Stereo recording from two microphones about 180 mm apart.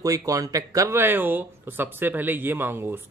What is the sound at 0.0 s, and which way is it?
Speech, 20° right (ahead or behind).